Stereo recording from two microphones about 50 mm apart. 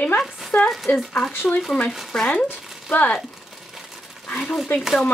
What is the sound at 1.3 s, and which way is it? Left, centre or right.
Speech, left.